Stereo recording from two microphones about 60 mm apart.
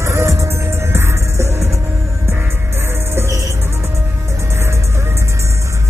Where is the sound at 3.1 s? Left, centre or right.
Right.